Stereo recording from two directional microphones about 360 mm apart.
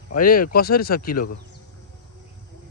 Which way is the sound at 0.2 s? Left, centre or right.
Left.